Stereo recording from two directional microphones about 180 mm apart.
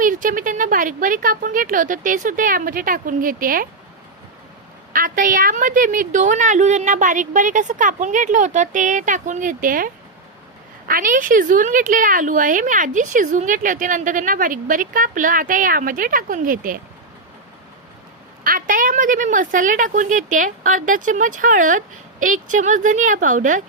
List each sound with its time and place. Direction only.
0.0 s speech: 50° right (ahead or behind)
4.9 s speech: 50° right (ahead or behind)
18.4 s speech: 50° right (ahead or behind)